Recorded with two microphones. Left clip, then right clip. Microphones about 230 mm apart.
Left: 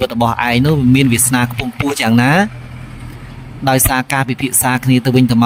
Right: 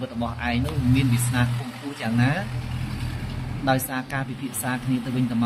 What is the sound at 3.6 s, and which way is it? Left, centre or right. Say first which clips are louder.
Speech: left 10 dB; left.